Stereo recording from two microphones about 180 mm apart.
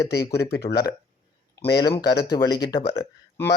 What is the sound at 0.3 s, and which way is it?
Speech, 65° left (ahead or behind).